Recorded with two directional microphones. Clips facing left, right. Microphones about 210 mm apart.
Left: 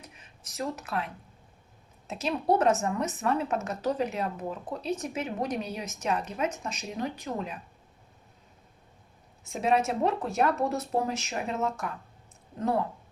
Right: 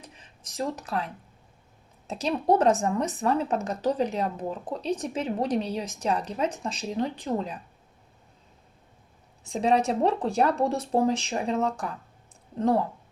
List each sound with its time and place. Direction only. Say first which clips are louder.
0.0 s a sound: right 2 dB; 30° right (ahead or behind)
2.0 s a woman's voice: right 3 dB; 35° right (ahead or behind)
9.4 s a woman's voice: right 3 dB; 35° right (ahead or behind)